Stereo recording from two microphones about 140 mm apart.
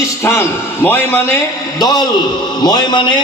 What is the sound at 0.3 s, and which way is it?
A man's voice, 15° left (ahead or behind).